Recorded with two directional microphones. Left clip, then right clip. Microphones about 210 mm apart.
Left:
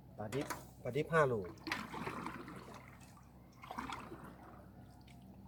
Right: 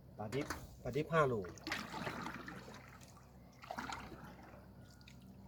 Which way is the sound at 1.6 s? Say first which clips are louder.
Left 1 dB; 25° right (ahead or behind).